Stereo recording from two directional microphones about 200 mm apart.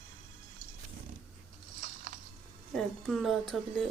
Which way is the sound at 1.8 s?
45° right (ahead or behind).